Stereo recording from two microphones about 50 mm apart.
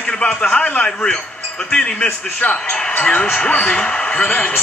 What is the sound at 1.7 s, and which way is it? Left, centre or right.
Speech, centre.